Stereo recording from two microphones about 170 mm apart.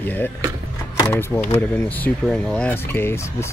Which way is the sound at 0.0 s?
10° left (ahead or behind).